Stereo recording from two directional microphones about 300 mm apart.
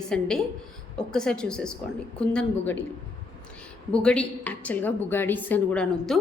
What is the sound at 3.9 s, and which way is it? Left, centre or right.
A woman's voice, centre.